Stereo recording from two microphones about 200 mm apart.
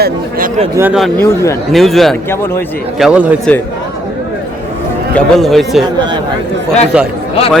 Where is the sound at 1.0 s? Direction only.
10° left (ahead or behind).